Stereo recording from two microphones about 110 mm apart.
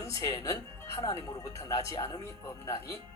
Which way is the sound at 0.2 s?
35° left (ahead or behind).